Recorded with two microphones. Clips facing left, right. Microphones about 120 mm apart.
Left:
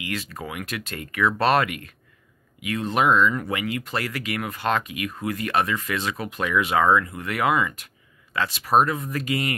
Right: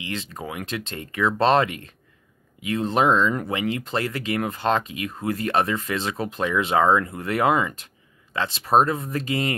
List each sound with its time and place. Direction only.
0.0 s speech: 25° right (ahead or behind)